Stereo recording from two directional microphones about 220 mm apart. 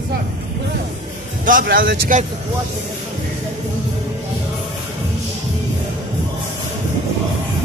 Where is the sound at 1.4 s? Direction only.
40° right (ahead or behind).